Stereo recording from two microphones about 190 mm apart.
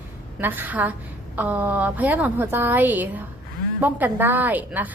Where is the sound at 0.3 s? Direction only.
10° right (ahead or behind).